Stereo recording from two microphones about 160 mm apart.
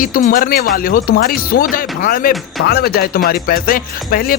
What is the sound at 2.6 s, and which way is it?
Speech, 75° left (ahead or behind).